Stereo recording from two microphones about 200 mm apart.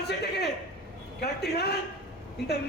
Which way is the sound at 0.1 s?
55° left (ahead or behind).